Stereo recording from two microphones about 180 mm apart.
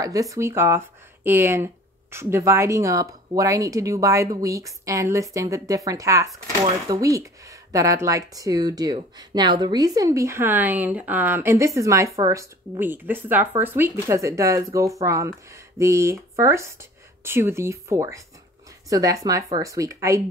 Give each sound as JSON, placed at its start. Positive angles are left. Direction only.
{"t": 0.0, "sound": "speech", "side_deg": -20}